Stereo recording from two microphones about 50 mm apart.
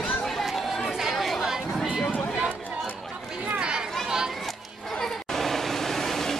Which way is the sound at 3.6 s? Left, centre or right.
Centre.